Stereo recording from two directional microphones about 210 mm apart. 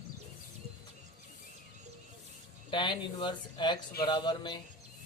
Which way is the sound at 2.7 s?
20° left (ahead or behind).